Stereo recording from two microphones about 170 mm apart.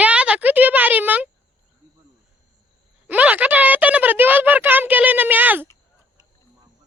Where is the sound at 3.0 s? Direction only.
10° right (ahead or behind).